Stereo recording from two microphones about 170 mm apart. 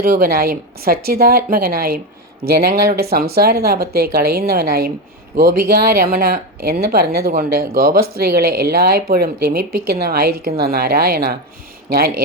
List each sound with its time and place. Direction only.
0.0 s speech: 60° right (ahead or behind)